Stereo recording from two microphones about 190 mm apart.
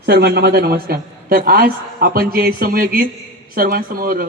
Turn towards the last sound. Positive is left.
turn(degrees=-50)  # may be behind; listen again after turning